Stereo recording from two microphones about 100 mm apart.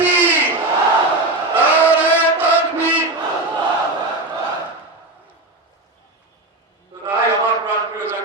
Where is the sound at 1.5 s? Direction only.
15° right (ahead or behind).